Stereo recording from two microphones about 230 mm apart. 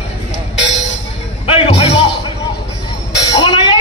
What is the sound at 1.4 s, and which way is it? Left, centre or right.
Music, left.